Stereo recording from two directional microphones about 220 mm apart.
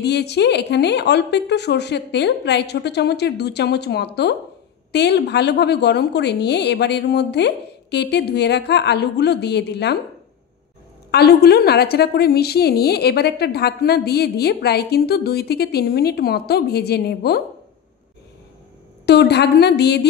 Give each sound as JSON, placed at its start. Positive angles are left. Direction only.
{"t": 0.0, "sound": "a woman's voice", "side_deg": 50}
{"t": 11.1, "sound": "a woman's voice", "side_deg": 45}
{"t": 19.0, "sound": "a woman's voice", "side_deg": 50}